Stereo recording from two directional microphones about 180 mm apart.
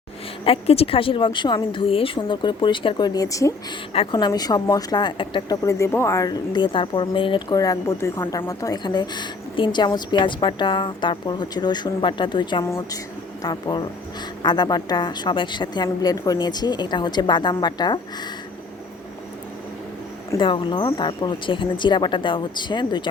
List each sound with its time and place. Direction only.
0.4 s a woman's voice: 35° left (ahead or behind); by 3.5 s 20° left (ahead or behind)
3.9 s a woman's voice: 30° left (ahead or behind)
5.6 s a woman's voice: 15° left (ahead or behind)
12.6 s a woman's voice: 15° left (ahead or behind)
20.4 s a woman's voice: 30° left (ahead or behind)